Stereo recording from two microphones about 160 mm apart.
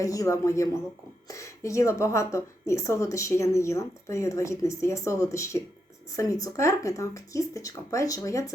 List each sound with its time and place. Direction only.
0.0 s a woman's voice: 20° left (ahead or behind)